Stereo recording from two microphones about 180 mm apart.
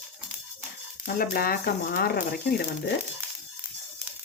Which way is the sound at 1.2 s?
55° left (ahead or behind).